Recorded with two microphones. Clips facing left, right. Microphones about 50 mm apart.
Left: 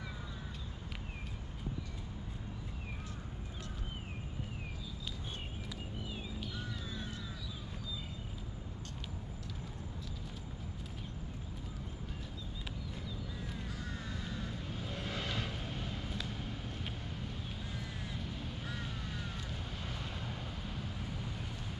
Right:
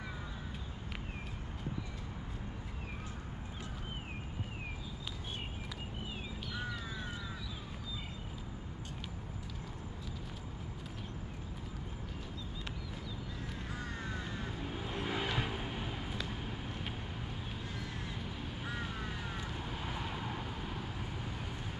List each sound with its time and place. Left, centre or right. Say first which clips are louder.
6.5 s a sound: right 3 dB; right
14.0 s vehicle: right 2 dB; right
18.1 s vehicle: right 1 dB; centre